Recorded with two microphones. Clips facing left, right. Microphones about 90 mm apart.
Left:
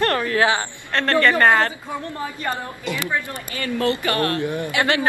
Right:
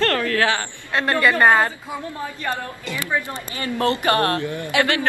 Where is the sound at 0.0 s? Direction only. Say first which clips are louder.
Left 1 dB; 20° left (ahead or behind).